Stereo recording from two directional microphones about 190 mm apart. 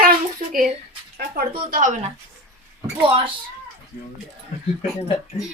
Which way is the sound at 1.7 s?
40° right (ahead or behind).